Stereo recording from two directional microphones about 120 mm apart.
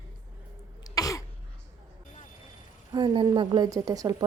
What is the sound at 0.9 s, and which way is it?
Throat clearing, 30° left (ahead or behind).